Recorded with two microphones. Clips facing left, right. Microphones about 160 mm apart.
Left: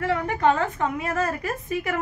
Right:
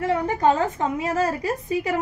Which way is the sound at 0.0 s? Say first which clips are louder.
Right 2 dB; 25° right (ahead or behind).